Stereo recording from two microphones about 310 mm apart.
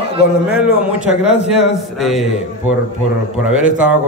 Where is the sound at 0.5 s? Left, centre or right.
Centre.